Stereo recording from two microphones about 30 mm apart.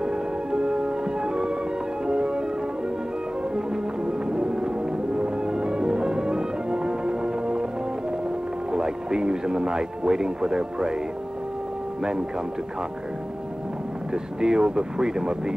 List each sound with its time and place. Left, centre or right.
0.0 s music: right
3.5 s music: right
8.7 s speech: right
14.1 s speech: right